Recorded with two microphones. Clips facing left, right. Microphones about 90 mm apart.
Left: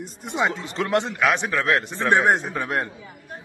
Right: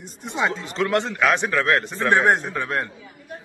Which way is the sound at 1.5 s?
10° left (ahead or behind).